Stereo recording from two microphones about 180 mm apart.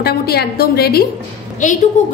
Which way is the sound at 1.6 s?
45° left (ahead or behind).